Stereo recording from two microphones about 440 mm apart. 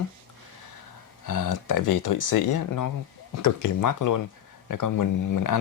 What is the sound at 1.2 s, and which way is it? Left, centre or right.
Speech, left.